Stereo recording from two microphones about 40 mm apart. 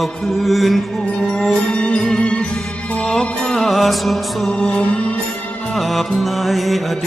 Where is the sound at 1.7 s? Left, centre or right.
Left.